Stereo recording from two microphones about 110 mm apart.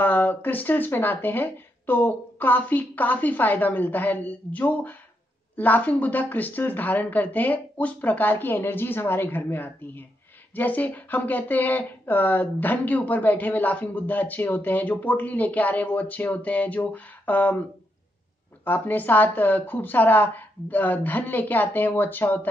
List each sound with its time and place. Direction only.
0.0 s speech: 15° left (ahead or behind)
18.6 s speech: 15° left (ahead or behind)